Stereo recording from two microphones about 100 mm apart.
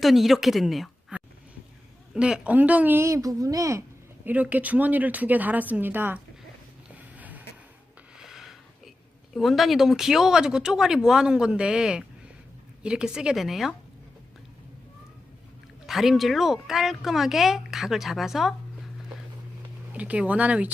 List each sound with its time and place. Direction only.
0.0 s speech: centre (ahead or behind)
2.1 s a woman's voice: 10° right (ahead or behind); by 3.8 s 30° right (ahead or behind)
4.3 s speech: 15° right (ahead or behind)
7.2 s vehicle: 15° right (ahead or behind)
8.2 s a sound: 5° right (ahead or behind)
9.3 s speech: centre (ahead or behind)
15.9 s speech: centre (ahead or behind)
19.9 s speech: 15° right (ahead or behind)